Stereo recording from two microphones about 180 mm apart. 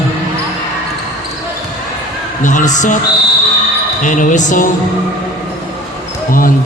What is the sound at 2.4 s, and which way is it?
Speech, 45° left (ahead or behind).